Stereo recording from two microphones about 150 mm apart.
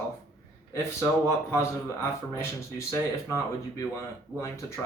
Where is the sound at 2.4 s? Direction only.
20° left (ahead or behind).